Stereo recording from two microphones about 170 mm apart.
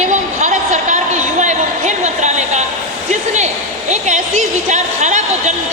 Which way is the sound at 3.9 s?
45° right (ahead or behind).